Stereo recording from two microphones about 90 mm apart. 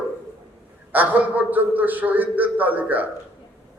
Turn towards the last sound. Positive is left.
turn(degrees=-20)  # may be behind; listen again after turning